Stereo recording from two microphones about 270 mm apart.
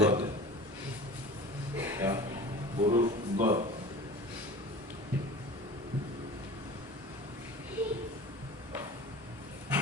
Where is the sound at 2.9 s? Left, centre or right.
Right.